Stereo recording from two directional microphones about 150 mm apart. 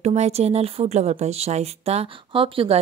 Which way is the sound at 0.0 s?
50° right (ahead or behind).